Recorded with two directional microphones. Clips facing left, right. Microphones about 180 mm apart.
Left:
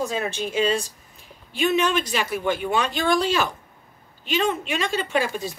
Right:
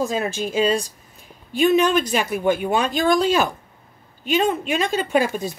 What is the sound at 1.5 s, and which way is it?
Speech, 45° right (ahead or behind).